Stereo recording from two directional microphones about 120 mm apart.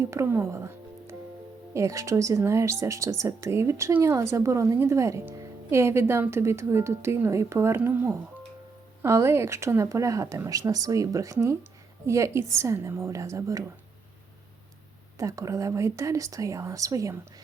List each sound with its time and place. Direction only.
0.0 s speech: 25° right (ahead or behind)
15.2 s speech: 25° right (ahead or behind)